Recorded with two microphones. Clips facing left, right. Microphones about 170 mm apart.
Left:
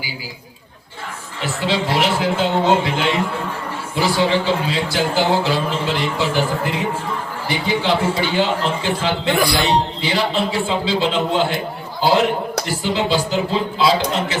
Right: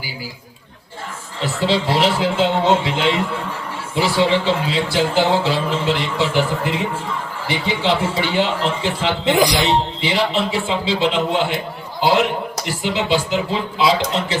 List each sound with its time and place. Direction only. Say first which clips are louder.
1.4 s a man's voice: right 2 dB; 30° right (ahead or behind)
12.6 s a man's voice: right 1 dB; 20° right (ahead or behind)